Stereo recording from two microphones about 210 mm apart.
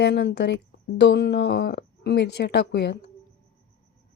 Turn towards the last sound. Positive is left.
turn(degrees=50)  # may be behind; listen again after turning